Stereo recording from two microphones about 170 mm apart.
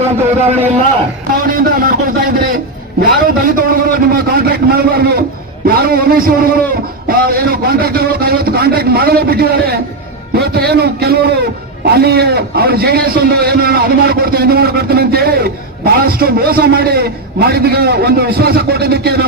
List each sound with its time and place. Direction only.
1.5 s a man's voice: 55° right (ahead or behind)
3.0 s a sound: 60° right (ahead or behind)
5.6 s a man's voice: 65° right (ahead or behind)